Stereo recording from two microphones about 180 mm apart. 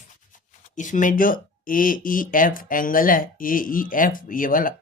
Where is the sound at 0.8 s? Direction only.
45° left (ahead or behind).